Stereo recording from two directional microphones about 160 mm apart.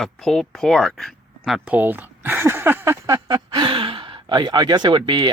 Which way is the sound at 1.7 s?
10° right (ahead or behind).